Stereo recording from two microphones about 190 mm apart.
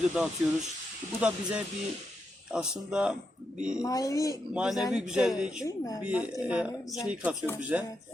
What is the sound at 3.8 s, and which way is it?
Speech, 15° left (ahead or behind).